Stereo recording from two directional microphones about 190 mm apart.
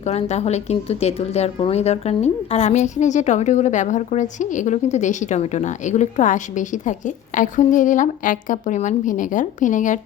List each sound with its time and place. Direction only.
0.0 s a woman's voice: 35° left (ahead or behind)